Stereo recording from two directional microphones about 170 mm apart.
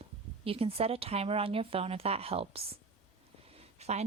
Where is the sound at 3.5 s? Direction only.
40° right (ahead or behind).